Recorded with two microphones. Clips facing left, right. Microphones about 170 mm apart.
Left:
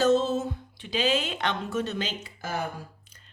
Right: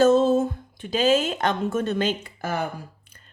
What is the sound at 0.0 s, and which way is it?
A woman's voice, 50° right (ahead or behind).